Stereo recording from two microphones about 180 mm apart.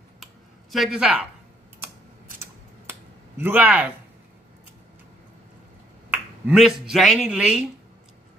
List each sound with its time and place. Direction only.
0.2 s a sound: centre (ahead or behind)
2.3 s scissors: 10° right (ahead or behind)
6.0 s speech: 10° right (ahead or behind)